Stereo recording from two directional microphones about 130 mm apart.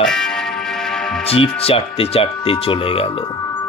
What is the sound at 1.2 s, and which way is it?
Speech, 50° left (ahead or behind).